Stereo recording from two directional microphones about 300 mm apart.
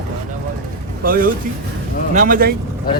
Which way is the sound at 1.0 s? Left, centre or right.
Right.